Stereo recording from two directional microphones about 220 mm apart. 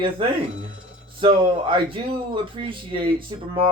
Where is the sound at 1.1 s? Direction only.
25° right (ahead or behind).